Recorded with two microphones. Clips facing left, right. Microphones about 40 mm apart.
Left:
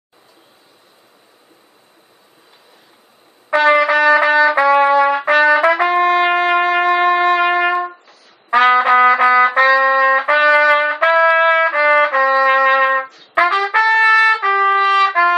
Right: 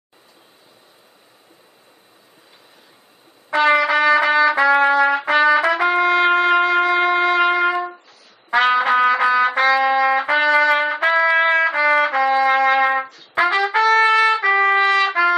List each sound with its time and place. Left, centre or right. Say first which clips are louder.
3.5 s music: left 3 dB; centre
4.7 s trumpet: left 3 dB; centre
7.0 s shofar: left 3 dB; centre
7.3 s trumpet: left 2 dB; centre
9.8 s trumpet: left 4 dB; centre
10.0 s trumpet: left 4 dB; centre
11.1 s trumpet: left 3 dB; left; by 12.6 s centre
12.6 s trumpet: left 3 dB; centre
13.8 s trumpet: left 3 dB; left
14.9 s trumpet: left 3 dB; centre